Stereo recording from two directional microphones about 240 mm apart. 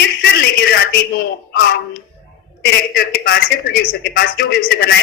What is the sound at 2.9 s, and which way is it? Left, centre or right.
Male singing, left.